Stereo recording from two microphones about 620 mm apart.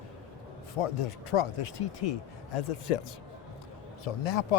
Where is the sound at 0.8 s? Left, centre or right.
Left.